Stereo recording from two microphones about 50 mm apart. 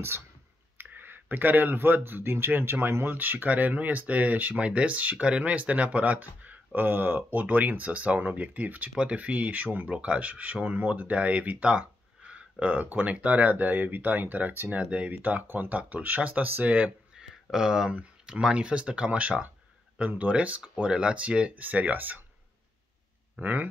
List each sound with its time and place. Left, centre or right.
0.7 s clicking: right
2.0 s speech: right
3.2 s speech: right
17.1 s a sound: centre
18.2 s speech: centre; by 22.2 s right
23.4 s speech: right